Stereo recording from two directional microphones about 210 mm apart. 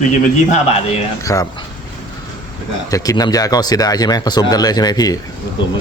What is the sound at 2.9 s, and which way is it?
Speech, 15° left (ahead or behind).